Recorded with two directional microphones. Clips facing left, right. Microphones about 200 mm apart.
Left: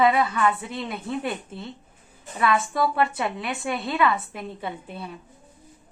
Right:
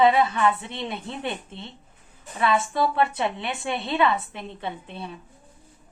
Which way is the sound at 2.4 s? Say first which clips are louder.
Even; 25° right (ahead or behind).